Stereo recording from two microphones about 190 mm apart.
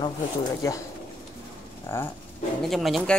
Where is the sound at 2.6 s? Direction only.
Centre (ahead or behind).